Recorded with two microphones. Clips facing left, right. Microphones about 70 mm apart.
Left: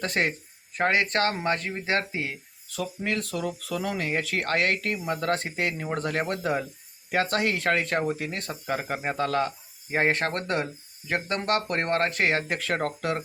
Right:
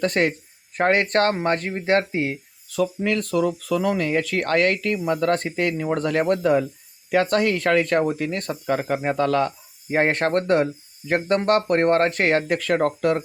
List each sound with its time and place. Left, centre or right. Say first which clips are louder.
0.0 s speech: right 6 dB; right